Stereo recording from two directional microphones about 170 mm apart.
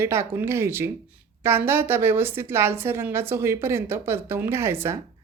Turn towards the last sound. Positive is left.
turn(degrees=-15)  # may be behind; listen again after turning